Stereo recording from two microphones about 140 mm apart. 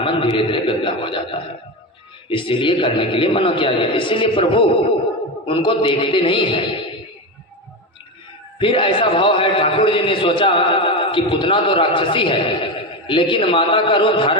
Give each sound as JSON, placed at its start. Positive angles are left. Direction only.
{"t": 0.0, "sound": "a man's voice", "side_deg": 40}
{"t": 8.5, "sound": "a man's voice", "side_deg": 40}